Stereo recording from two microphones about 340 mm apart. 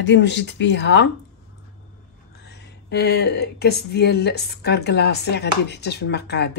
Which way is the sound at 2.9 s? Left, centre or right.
Left.